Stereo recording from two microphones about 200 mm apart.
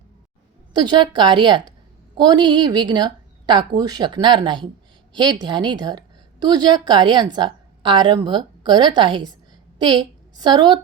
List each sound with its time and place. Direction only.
0.7 s a woman's voice: 20° right (ahead or behind)